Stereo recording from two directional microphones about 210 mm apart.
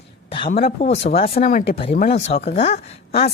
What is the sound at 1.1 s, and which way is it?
Speech, 30° left (ahead or behind).